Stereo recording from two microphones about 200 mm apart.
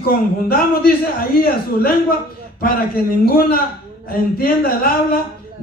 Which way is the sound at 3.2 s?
45° left (ahead or behind).